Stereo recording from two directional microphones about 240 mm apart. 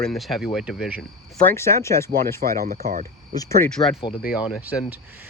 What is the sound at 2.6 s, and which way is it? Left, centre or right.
Speech, right.